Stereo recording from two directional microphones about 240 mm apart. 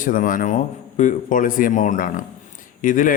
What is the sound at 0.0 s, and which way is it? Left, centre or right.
Speech, left.